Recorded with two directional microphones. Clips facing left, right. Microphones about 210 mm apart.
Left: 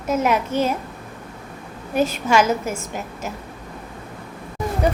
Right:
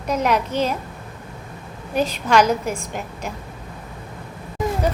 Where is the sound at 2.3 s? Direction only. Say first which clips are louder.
Right 2 dB; 5° left (ahead or behind).